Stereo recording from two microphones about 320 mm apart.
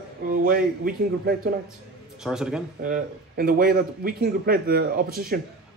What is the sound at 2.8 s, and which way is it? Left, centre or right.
Speech, right.